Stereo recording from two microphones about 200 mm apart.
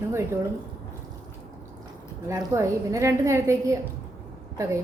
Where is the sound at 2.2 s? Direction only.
15° right (ahead or behind).